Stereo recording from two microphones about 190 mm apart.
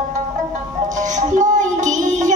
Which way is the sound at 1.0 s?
40° right (ahead or behind).